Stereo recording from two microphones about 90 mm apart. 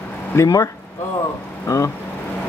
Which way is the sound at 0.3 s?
30° left (ahead or behind).